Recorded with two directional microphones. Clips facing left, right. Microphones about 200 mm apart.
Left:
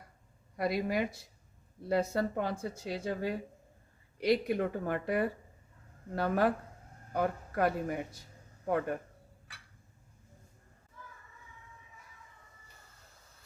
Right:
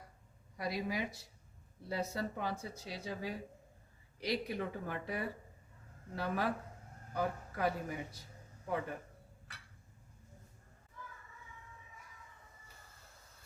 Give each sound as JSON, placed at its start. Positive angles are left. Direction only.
{"t": 0.5, "sound": "a man's voice", "side_deg": 60}